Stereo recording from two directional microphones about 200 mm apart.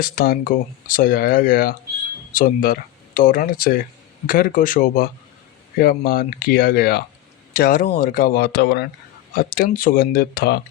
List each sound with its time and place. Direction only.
0.0 s speech: 45° left (ahead or behind)